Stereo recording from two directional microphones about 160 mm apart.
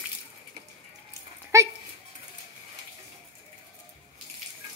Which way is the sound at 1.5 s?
20° right (ahead or behind).